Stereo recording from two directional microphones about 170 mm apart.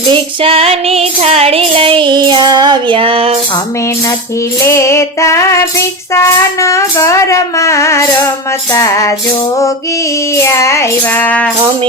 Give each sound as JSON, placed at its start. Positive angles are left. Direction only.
{"t": 0.1, "sound": "female singing", "side_deg": -35}
{"t": 4.6, "sound": "music", "side_deg": 15}
{"t": 10.3, "sound": "music", "side_deg": 15}